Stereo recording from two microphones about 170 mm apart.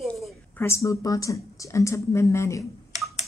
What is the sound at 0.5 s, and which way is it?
Speech, 15° left (ahead or behind).